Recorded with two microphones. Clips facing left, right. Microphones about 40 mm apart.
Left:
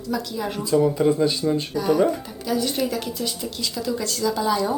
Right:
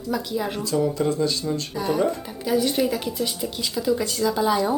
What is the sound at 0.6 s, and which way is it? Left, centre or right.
Speech, centre.